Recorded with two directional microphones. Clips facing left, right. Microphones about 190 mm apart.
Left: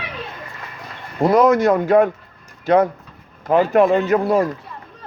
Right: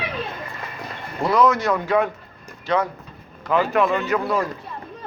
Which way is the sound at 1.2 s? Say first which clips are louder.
Left 5 dB; 50° left (ahead or behind).